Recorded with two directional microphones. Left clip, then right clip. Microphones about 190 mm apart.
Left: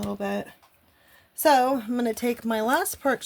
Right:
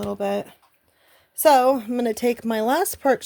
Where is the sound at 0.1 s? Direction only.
55° right (ahead or behind).